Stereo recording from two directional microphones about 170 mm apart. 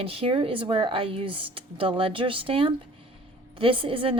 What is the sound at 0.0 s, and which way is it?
A woman's voice, 35° right (ahead or behind).